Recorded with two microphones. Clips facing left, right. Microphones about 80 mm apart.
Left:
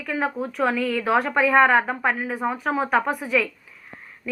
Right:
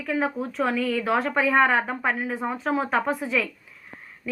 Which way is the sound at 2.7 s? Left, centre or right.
Centre.